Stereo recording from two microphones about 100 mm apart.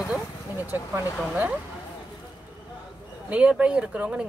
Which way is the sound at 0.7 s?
20° right (ahead or behind).